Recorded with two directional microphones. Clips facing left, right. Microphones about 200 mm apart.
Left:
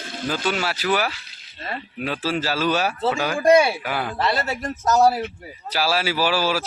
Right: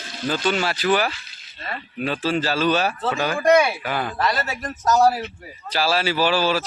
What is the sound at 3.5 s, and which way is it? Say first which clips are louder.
Speech: left 1 dB; 30° left (ahead or behind).